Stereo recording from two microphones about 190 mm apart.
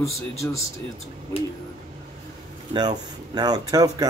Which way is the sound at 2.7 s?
20° right (ahead or behind).